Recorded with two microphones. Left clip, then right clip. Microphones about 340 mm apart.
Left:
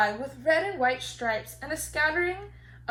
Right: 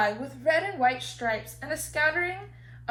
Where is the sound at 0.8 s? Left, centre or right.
Centre.